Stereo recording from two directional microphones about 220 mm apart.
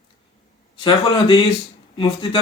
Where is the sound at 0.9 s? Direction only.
25° left (ahead or behind).